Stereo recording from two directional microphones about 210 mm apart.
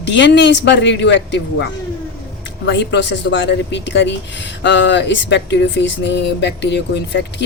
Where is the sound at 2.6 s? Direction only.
55° left (ahead or behind).